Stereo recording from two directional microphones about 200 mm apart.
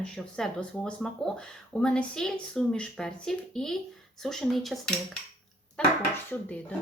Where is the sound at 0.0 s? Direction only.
5° left (ahead or behind).